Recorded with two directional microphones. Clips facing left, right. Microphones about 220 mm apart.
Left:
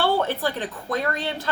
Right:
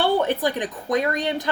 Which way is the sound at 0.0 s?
15° right (ahead or behind).